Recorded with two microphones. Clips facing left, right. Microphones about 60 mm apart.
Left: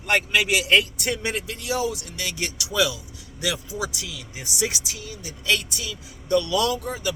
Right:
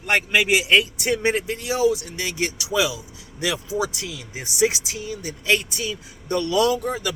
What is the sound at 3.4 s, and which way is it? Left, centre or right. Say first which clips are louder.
Speech: right 4 dB; right.